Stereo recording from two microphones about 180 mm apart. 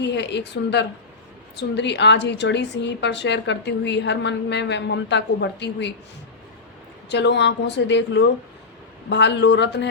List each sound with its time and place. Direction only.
0.0 s a woman's voice: 75° left (ahead or behind)
7.1 s a woman's voice: 75° left (ahead or behind)